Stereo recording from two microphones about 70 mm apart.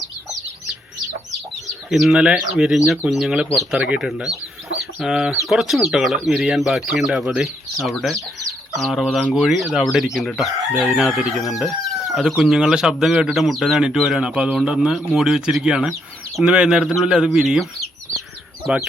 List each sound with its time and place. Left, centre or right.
1.6 s chicken: centre
2.2 s speech: centre
3.8 s a man's voice: centre